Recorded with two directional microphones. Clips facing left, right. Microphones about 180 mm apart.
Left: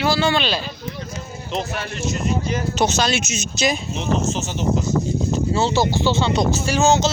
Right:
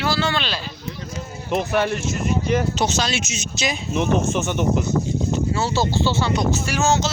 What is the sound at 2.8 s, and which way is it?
Speech, 55° left (ahead or behind).